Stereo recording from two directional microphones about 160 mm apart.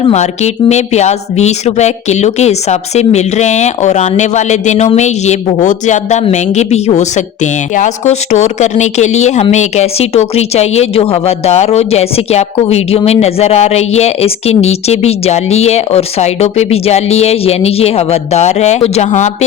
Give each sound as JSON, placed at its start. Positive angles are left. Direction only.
{"t": 0.0, "sound": "speech", "side_deg": 45}